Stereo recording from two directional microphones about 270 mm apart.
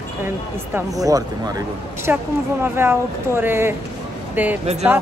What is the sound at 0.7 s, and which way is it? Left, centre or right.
A man's voice, centre.